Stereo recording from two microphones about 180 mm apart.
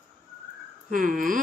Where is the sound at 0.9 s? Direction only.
50° right (ahead or behind).